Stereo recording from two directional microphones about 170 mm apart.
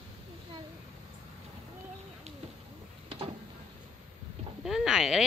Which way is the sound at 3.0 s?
35° right (ahead or behind).